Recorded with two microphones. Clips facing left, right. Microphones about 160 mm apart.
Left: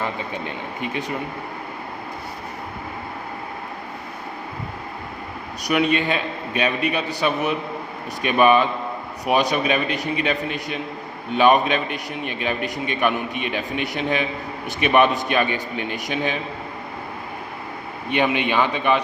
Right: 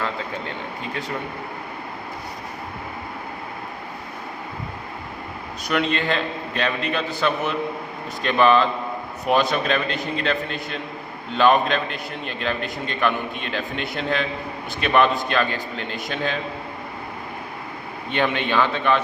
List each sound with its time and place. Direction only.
0.0 s speech: 15° left (ahead or behind)
5.6 s a man's voice: 15° left (ahead or behind)
18.1 s a man's voice: 15° left (ahead or behind)